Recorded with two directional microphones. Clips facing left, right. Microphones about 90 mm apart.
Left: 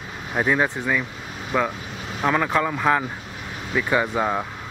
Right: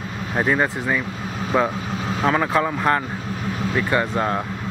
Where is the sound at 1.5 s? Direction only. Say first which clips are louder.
Right 3 dB; 20° right (ahead or behind).